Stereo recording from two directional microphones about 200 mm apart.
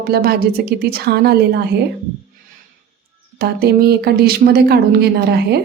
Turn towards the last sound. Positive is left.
turn(degrees=-55)  # may be behind; listen again after turning